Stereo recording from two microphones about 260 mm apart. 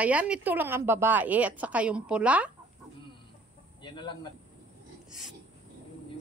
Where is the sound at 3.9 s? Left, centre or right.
Centre.